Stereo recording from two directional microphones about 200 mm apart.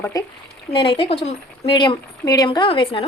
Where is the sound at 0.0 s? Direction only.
15° left (ahead or behind).